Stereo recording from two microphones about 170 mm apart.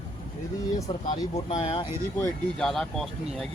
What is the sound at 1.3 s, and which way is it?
Speech, 40° left (ahead or behind).